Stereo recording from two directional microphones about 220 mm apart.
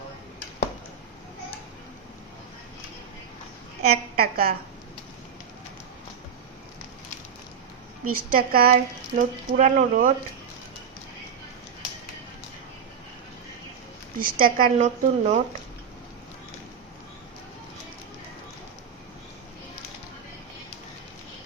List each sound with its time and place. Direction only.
3.8 s a woman's voice: 45° right (ahead or behind)
8.1 s speech: 40° right (ahead or behind)
14.2 s speech: 40° right (ahead or behind)